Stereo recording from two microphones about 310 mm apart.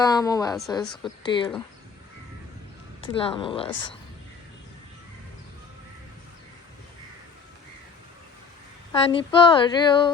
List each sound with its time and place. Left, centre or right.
0.0 s a woman's voice: centre
3.0 s speech: centre
8.9 s speech: centre